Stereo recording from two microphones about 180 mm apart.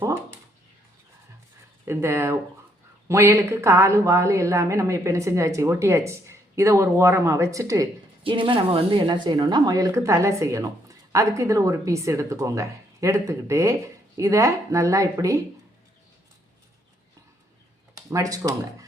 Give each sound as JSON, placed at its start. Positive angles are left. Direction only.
{"t": 1.8, "sound": "speech", "side_deg": -15}
{"t": 8.2, "sound": "speech", "side_deg": -30}
{"t": 17.9, "sound": "speech", "side_deg": -20}